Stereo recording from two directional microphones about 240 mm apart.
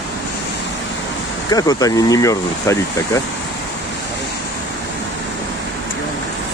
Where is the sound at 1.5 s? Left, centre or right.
Centre.